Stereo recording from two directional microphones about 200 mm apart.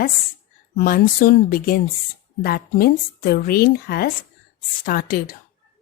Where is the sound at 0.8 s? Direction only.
45° left (ahead or behind).